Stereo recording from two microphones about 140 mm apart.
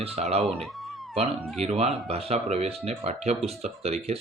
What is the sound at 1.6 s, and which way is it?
Speech, 50° right (ahead or behind).